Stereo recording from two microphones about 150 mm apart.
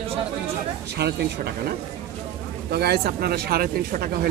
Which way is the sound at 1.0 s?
90° right.